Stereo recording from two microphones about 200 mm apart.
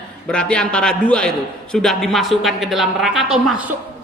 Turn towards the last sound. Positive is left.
turn(degrees=-5)  # may be behind; listen again after turning